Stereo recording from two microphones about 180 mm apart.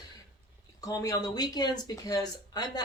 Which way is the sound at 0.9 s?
20° left (ahead or behind).